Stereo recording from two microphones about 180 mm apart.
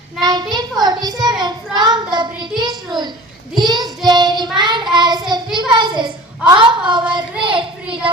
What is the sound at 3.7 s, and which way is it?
A child's voice, 25° right (ahead or behind).